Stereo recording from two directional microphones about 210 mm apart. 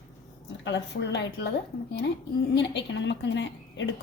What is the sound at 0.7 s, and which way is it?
Speech, 55° left (ahead or behind).